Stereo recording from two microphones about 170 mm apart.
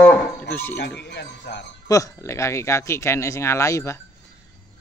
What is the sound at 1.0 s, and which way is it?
Speech, 85° left.